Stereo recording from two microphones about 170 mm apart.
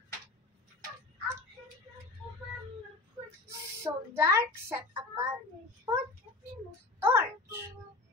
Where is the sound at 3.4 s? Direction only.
15° right (ahead or behind).